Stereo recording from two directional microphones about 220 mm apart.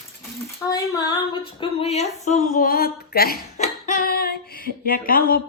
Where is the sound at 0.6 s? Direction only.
15° left (ahead or behind).